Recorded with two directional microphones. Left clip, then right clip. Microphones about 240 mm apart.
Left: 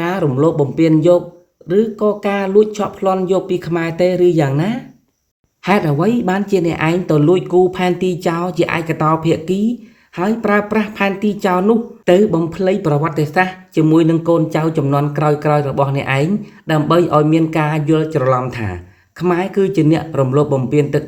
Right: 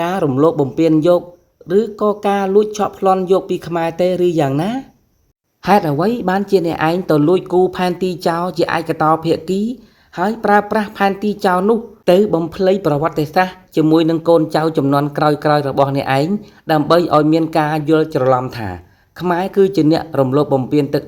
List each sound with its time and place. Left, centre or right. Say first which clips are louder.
0.0 s a woman's voice: right 1 dB; right